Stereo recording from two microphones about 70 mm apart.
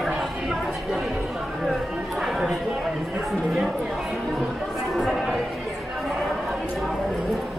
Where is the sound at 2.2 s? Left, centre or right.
Centre.